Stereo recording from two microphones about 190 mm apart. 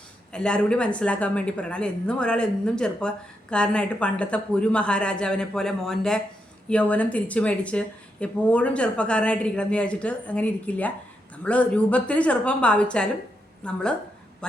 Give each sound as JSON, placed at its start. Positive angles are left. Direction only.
{"t": 0.3, "sound": "a woman's voice", "side_deg": 5}